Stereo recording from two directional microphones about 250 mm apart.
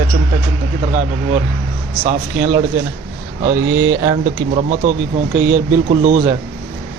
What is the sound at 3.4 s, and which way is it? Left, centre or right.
Speech, centre.